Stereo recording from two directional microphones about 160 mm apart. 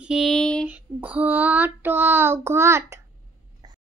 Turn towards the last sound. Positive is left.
turn(degrees=-25)  # may be behind; listen again after turning